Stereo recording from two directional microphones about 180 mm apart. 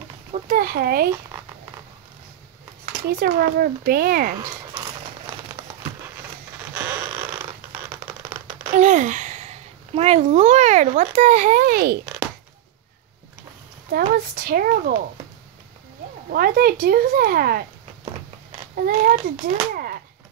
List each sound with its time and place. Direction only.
0.3 s speech: 55° right (ahead or behind)
2.8 s speech: 55° right (ahead or behind)
6.7 s a sound: 10° right (ahead or behind)
8.7 s speech: 45° right (ahead or behind)
13.9 s speech: 55° right (ahead or behind)
16.3 s speech: 55° right (ahead or behind)
18.8 s speech: 50° right (ahead or behind)
19.7 s a sound: 55° right (ahead or behind)